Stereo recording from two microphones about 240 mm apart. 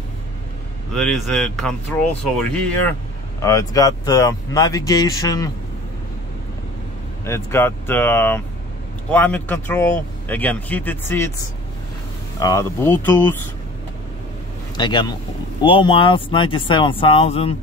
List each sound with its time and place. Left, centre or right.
0.9 s speech: centre
3.3 s speech: centre
7.2 s speech: centre
12.4 s speech: centre
14.8 s speech: centre